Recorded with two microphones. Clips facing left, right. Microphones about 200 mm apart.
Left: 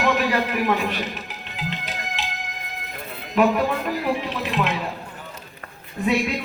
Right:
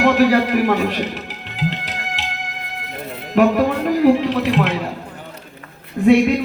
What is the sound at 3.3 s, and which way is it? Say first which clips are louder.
Speech: right 5 dB; 75° right (ahead or behind).